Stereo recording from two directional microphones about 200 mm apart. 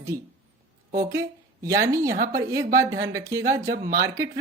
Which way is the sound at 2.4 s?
15° right (ahead or behind).